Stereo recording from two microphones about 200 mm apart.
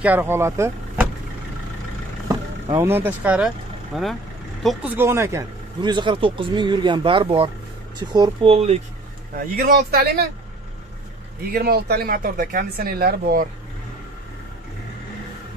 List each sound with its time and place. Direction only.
0.0 s speech: 10° right (ahead or behind)
2.2 s speech: 15° right (ahead or behind)
9.6 s speech: 50° right (ahead or behind)
11.5 s speech: 50° right (ahead or behind)